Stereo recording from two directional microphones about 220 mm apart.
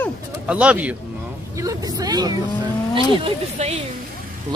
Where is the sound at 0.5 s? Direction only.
5° right (ahead or behind).